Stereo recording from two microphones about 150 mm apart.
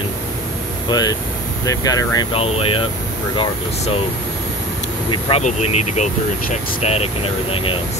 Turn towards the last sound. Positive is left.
turn(degrees=40)  # may be behind; listen again after turning